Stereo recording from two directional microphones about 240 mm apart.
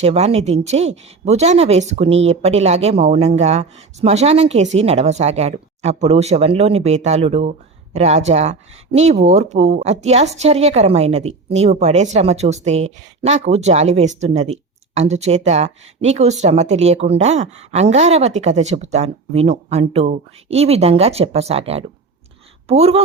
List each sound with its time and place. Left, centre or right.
0.0 s a woman's voice: right